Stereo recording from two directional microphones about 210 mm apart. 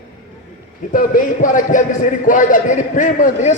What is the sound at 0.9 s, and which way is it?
A man's voice, 40° left (ahead or behind).